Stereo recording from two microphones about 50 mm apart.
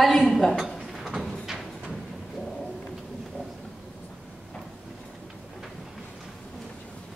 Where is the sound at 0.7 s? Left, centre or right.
Centre.